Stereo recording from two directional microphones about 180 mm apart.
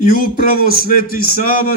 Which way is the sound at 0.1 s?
55° left (ahead or behind).